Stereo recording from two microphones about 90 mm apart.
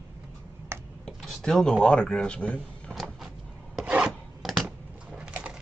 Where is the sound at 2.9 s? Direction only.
Centre (ahead or behind).